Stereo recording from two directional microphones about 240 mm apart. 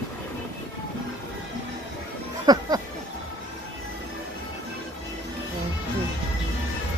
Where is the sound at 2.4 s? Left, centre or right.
Centre.